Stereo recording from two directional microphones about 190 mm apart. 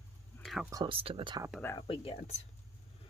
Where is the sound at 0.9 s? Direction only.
30° right (ahead or behind).